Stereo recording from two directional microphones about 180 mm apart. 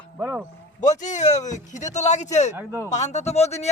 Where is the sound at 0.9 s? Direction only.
45° left (ahead or behind).